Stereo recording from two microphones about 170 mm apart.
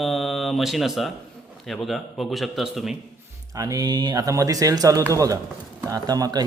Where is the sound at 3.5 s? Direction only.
20° right (ahead or behind).